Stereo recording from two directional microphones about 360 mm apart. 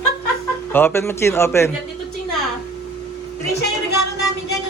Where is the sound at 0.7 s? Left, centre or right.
Centre.